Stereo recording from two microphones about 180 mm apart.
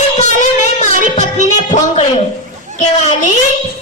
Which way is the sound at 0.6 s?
40° left (ahead or behind).